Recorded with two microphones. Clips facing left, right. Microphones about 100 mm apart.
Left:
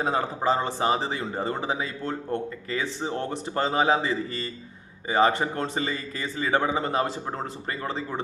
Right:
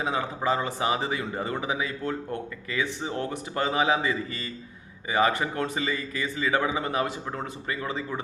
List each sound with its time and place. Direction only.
0.0 s speech: 35° left (ahead or behind)